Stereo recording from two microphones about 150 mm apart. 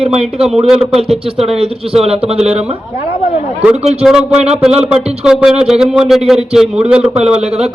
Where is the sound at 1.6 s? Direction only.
40° right (ahead or behind).